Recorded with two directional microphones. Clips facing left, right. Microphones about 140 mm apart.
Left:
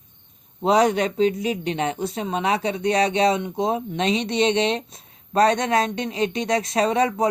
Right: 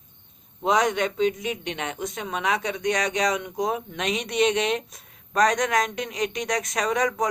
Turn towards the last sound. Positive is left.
turn(degrees=30)  # may be behind; listen again after turning